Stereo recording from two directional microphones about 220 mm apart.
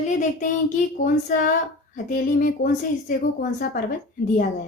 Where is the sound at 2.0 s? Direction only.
40° left (ahead or behind).